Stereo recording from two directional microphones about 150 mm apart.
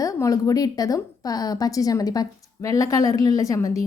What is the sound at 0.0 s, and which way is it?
A woman's voice, 25° left (ahead or behind).